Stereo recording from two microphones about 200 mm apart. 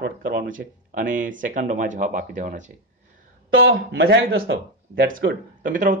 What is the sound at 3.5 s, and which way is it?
Speech, 75° right (ahead or behind).